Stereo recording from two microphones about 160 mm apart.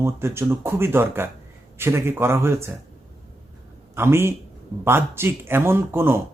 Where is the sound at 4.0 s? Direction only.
15° right (ahead or behind).